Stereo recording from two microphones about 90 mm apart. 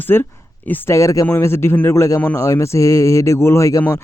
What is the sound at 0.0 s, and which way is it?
Speech, 20° left (ahead or behind).